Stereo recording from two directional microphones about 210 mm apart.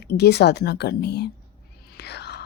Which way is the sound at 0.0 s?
50° left (ahead or behind).